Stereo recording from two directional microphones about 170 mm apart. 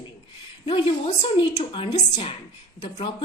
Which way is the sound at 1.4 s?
30° left (ahead or behind).